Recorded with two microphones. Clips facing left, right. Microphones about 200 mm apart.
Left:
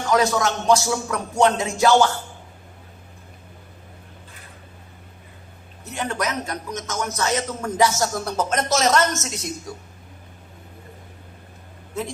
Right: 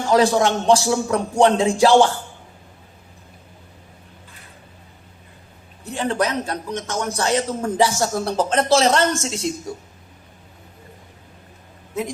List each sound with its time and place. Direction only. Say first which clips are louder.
0.0 s a man's voice: right 4 dB; 30° right (ahead or behind)
5.8 s a man's voice: right 4 dB; 30° right (ahead or behind)